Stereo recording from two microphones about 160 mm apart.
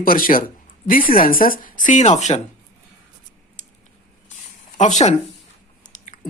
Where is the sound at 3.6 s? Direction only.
50° left (ahead or behind).